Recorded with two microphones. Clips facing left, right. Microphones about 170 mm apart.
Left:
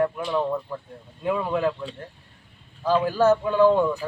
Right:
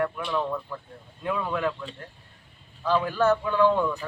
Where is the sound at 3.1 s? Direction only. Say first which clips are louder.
Left 4 dB; 40° left (ahead or behind).